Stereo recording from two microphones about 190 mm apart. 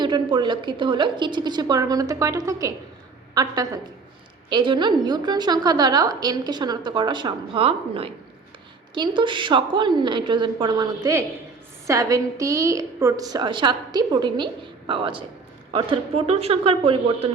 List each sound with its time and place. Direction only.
0.0 s a woman's voice: 25° right (ahead or behind)